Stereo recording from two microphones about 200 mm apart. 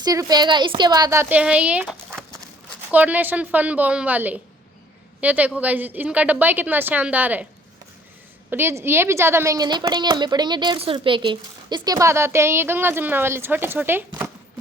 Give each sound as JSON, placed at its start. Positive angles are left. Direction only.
{"t": 0.0, "sound": "a woman's voice", "side_deg": -20}
{"t": 2.0, "sound": "horse", "side_deg": 0}
{"t": 2.9, "sound": "a woman's voice", "side_deg": -10}
{"t": 8.4, "sound": "a woman's voice", "side_deg": -10}